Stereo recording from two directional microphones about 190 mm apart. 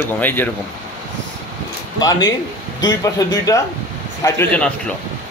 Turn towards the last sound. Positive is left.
turn(degrees=10)  # may be behind; listen again after turning